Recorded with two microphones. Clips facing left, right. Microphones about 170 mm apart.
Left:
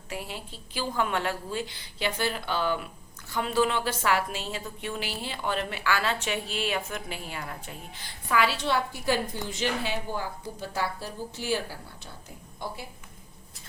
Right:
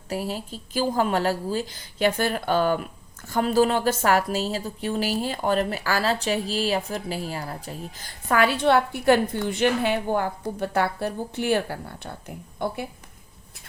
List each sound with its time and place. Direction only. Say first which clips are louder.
0.1 s a woman's voice: right 8 dB; 40° right (ahead or behind); by 12.7 s 60° right (ahead or behind)